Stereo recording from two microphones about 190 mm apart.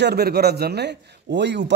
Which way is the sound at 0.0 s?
55° right (ahead or behind).